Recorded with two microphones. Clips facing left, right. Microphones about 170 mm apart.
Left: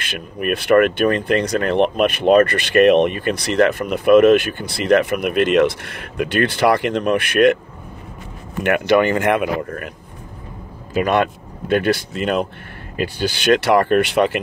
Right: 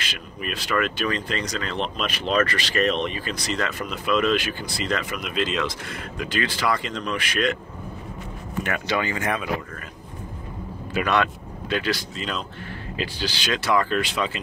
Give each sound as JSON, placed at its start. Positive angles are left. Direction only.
{"t": 0.0, "sound": "speech", "side_deg": 60}
{"t": 8.6, "sound": "speech", "side_deg": 65}
{"t": 10.9, "sound": "speech", "side_deg": 45}
{"t": 11.7, "sound": "speech", "side_deg": 55}